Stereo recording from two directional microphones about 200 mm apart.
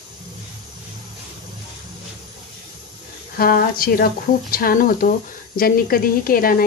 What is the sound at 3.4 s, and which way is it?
Speech, 50° left (ahead or behind).